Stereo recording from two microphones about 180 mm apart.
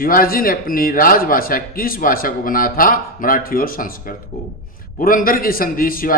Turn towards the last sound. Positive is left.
turn(degrees=50)  # may be behind; listen again after turning